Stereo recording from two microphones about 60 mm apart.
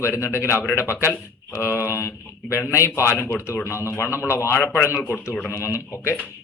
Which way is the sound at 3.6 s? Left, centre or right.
Left.